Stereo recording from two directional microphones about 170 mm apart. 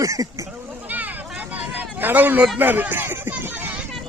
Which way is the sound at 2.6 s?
10° right (ahead or behind).